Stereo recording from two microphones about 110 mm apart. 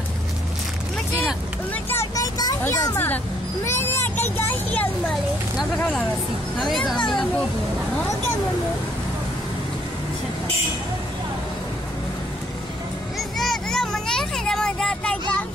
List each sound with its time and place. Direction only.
1.2 s speech: 15° left (ahead or behind)
2.1 s vehicle: 35° left (ahead or behind)
2.6 s speech: 25° left (ahead or behind)
7.0 s speech: 5° left (ahead or behind)
13.4 s a sound: 5° left (ahead or behind)